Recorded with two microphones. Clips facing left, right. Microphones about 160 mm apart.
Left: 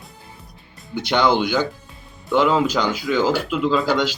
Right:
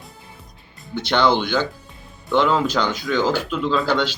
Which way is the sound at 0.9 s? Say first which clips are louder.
Even; 10° left (ahead or behind).